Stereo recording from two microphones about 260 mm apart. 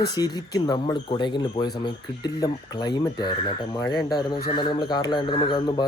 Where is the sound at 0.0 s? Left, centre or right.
Centre.